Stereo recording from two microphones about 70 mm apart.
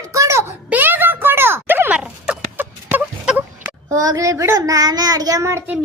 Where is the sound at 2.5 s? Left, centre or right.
Right.